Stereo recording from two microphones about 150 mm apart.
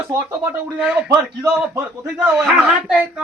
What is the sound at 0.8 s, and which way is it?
Speech, 5° right (ahead or behind).